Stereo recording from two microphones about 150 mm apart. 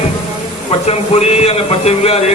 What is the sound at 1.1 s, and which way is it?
A man's voice, 45° left (ahead or behind).